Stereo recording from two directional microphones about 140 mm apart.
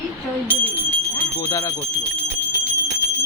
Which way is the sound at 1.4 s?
20° left (ahead or behind).